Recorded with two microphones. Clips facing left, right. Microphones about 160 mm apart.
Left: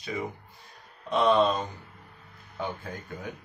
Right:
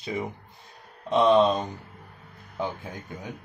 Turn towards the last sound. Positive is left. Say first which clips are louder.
# even
turn(degrees=-20)  # may be behind; listen again after turning